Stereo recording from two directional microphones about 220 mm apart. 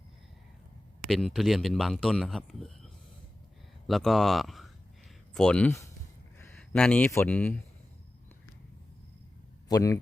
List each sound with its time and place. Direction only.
1.0 s speech: centre (ahead or behind)
9.6 s speech: 15° left (ahead or behind)